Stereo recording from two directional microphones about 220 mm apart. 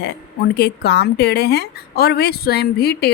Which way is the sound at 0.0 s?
50° left (ahead or behind).